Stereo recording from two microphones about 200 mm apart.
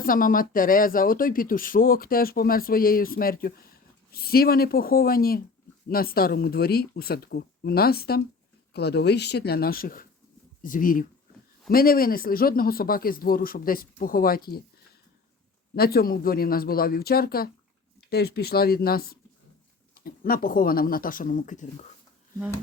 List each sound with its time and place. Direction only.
0.0 s speech: 45° left (ahead or behind)
15.7 s speech: 50° left (ahead or behind)